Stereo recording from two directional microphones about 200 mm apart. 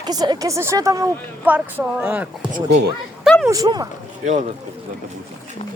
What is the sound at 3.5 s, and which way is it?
Speech, 20° right (ahead or behind).